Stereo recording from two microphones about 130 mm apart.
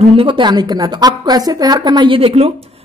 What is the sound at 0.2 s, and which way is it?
A woman's voice, 40° right (ahead or behind).